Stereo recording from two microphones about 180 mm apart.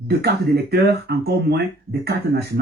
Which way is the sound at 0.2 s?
65° right (ahead or behind).